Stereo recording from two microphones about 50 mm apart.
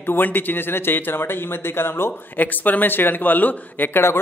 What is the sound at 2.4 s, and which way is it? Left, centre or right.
A man's voice, left.